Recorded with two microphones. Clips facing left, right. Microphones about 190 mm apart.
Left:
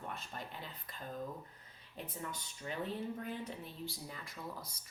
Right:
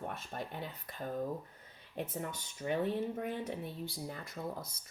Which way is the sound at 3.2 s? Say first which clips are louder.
Right 5 dB; 55° right (ahead or behind).